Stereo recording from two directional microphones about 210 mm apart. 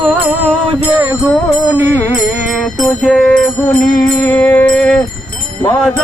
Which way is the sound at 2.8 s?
Centre (ahead or behind).